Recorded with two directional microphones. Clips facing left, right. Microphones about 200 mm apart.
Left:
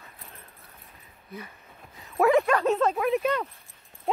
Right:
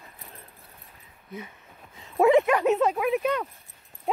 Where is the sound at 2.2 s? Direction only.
20° right (ahead or behind).